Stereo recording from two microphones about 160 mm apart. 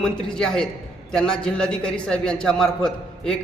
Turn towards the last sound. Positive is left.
turn(degrees=5)  # may be behind; listen again after turning